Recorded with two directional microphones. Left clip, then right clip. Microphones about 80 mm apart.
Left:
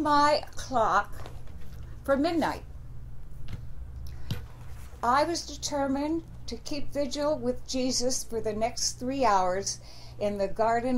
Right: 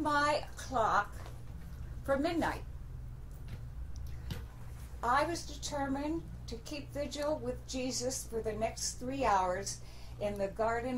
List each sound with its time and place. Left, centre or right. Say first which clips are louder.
0.0 s a woman's voice: left 8 dB; left
2.0 s a woman's voice: left 6 dB; left
4.3 s a sound: left 7 dB; left
5.0 s a woman's voice: left 6 dB; left